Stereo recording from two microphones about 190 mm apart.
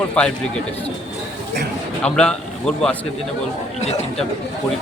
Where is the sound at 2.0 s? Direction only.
5° left (ahead or behind).